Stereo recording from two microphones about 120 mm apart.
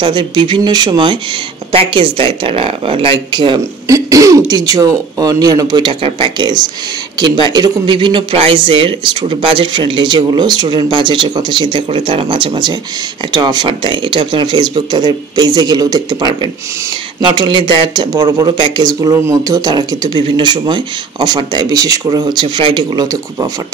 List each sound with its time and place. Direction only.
0.0 s speech: 40° right (ahead or behind)
1.7 s speech: 50° right (ahead or behind)
3.8 s throat clearing: 25° right (ahead or behind)
4.5 s speech: 30° right (ahead or behind)